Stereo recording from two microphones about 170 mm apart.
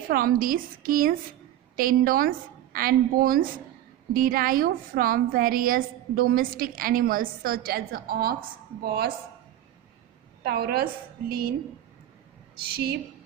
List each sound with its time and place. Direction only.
0.1 s a woman's voice: 60° right (ahead or behind)
10.4 s a woman's voice: 65° right (ahead or behind)
12.7 s a woman's voice: 65° right (ahead or behind)